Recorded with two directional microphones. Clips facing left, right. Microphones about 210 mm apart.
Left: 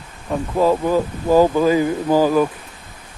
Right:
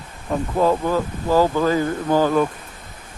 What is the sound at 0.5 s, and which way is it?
Speech, 10° left (ahead or behind).